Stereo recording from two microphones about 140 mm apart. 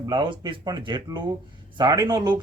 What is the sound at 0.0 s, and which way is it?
Speech, 30° right (ahead or behind).